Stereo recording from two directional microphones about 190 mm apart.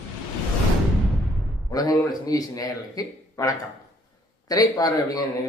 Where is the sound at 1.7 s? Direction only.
20° left (ahead or behind).